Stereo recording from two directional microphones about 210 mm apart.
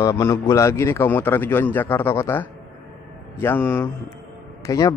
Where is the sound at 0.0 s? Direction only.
15° left (ahead or behind).